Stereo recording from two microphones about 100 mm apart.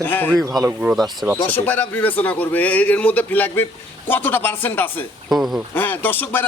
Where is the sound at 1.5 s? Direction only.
20° left (ahead or behind).